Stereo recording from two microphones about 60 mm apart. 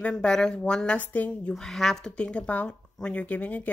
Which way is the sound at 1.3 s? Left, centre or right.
Centre.